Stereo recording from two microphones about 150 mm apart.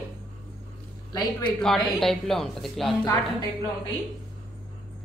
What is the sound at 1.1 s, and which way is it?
Speech, 25° left (ahead or behind).